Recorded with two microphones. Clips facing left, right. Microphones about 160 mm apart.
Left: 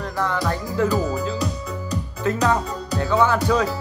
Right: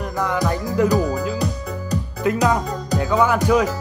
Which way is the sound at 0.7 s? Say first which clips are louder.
Right 3 dB; 15° right (ahead or behind).